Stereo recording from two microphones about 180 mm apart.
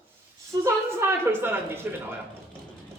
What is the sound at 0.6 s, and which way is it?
A woman's voice, 10° right (ahead or behind).